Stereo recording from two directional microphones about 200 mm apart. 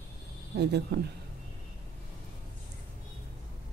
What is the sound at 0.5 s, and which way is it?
Speech, 55° right (ahead or behind).